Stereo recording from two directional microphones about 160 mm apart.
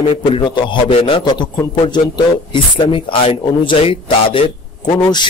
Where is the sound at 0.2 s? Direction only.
35° left (ahead or behind).